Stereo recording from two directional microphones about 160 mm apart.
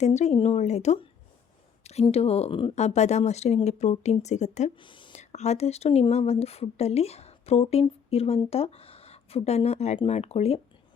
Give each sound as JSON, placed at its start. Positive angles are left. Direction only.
{"t": 0.0, "sound": "speech", "side_deg": 45}
{"t": 4.8, "sound": "a sound", "side_deg": 30}
{"t": 5.1, "sound": "speech", "side_deg": 45}